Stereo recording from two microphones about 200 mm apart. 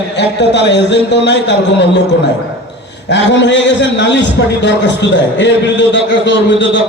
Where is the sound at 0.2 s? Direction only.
60° left (ahead or behind).